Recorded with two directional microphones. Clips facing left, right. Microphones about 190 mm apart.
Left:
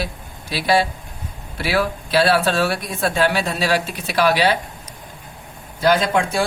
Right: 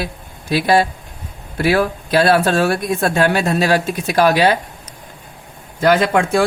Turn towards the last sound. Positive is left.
turn(degrees=-55)  # may be behind; listen again after turning